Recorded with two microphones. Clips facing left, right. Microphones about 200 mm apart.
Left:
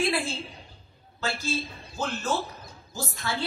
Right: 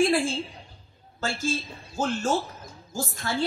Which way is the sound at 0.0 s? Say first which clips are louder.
Right 5 dB; 45° right (ahead or behind).